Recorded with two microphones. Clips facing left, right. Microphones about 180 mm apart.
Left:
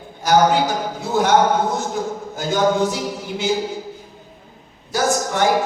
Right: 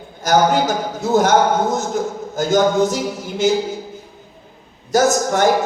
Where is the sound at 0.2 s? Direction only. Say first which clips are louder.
Even; 45° right (ahead or behind).